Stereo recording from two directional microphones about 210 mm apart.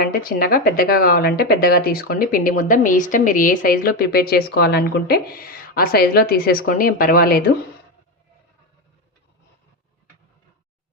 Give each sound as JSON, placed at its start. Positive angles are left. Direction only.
{"t": 0.0, "sound": "speech", "side_deg": 45}